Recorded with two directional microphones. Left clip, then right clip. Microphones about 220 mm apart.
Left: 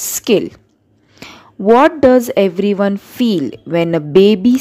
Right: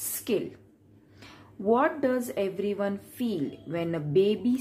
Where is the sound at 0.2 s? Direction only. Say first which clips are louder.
Left 15 dB; 45° left (ahead or behind).